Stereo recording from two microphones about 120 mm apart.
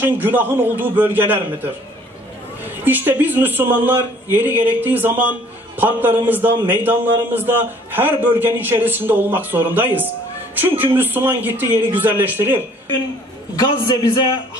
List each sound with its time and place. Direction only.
0.0 s a man's voice: 15° right (ahead or behind)
13.6 s a man's voice: 35° left (ahead or behind)